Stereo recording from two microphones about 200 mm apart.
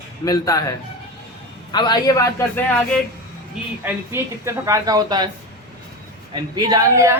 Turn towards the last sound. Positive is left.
turn(degrees=-15)  # may be behind; listen again after turning